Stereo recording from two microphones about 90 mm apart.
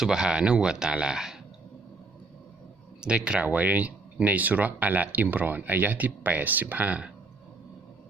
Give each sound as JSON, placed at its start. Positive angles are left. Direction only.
{"t": 0.0, "sound": "speech", "side_deg": -10}
{"t": 3.0, "sound": "speech", "side_deg": -10}